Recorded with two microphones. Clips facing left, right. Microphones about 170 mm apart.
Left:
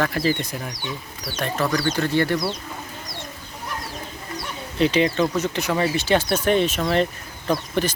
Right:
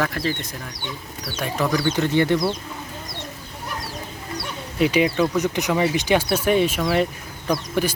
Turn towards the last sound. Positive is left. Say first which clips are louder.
# even
turn(degrees=-10)  # may be behind; listen again after turning